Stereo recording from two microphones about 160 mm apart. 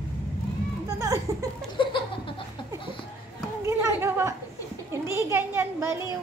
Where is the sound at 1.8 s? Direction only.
30° left (ahead or behind).